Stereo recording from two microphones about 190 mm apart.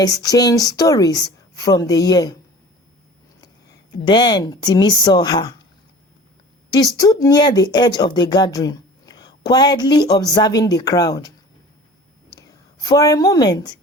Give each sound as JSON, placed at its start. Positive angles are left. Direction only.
{"t": 0.0, "sound": "speech", "side_deg": 20}
{"t": 4.0, "sound": "speech", "side_deg": 20}
{"t": 7.0, "sound": "speech", "side_deg": 20}
{"t": 12.4, "sound": "a woman's voice", "side_deg": 20}